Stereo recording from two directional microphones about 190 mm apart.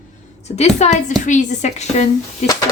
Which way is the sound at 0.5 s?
35° left (ahead or behind).